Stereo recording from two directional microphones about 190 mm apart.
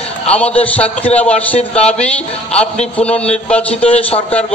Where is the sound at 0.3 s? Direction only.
5° left (ahead or behind).